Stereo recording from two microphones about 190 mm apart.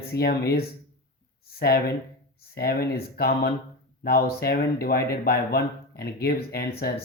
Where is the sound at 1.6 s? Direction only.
55° left (ahead or behind).